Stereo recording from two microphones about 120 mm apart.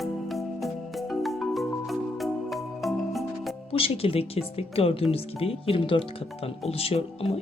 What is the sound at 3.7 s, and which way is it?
Speech, 55° left (ahead or behind).